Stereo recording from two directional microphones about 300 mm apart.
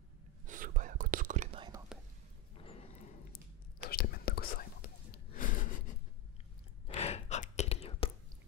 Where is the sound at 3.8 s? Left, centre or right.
Left.